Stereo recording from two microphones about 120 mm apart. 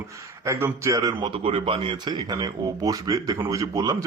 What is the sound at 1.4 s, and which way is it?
A man's voice, 50° right (ahead or behind).